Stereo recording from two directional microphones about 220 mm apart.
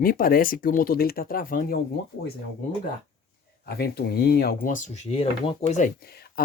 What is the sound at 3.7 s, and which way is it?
Speech, 45° left (ahead or behind).